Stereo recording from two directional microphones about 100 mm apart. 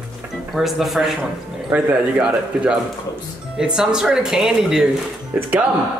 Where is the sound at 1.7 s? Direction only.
10° right (ahead or behind).